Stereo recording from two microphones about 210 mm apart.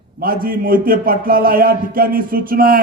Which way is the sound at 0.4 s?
45° right (ahead or behind).